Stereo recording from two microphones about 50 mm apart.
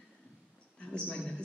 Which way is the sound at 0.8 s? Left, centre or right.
Left.